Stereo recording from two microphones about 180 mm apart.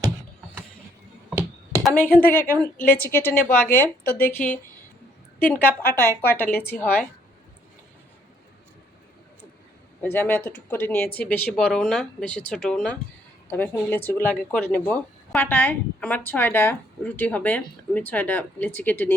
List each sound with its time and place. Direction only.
1.8 s speech: 10° left (ahead or behind)
2.7 s a woman's voice: 55° left (ahead or behind)
3.0 s speech: 10° left (ahead or behind)
10.0 s speech: 10° left (ahead or behind)